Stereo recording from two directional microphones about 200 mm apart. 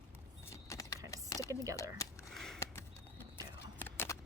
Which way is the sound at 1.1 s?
15° left (ahead or behind).